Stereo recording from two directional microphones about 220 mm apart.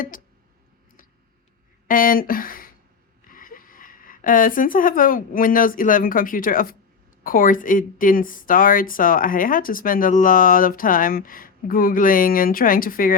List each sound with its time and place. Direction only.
1.9 s speech: 40° left (ahead or behind)